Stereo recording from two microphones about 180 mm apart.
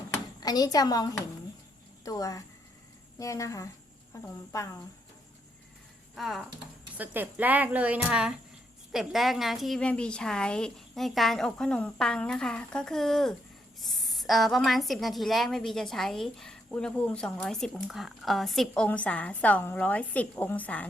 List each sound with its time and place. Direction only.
0.3 s a woman's voice: 20° left (ahead or behind)
6.1 s a woman's voice: centre (ahead or behind)
6.9 s a woman's voice: 10° right (ahead or behind); by 20.8 s 10° left (ahead or behind)